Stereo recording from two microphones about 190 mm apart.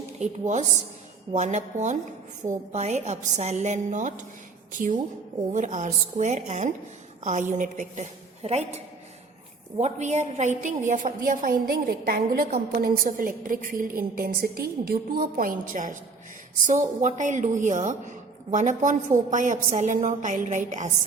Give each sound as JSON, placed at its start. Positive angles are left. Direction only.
{"t": 0.2, "sound": "a woman's voice", "side_deg": -40}
{"t": 5.5, "sound": "a woman's voice", "side_deg": -40}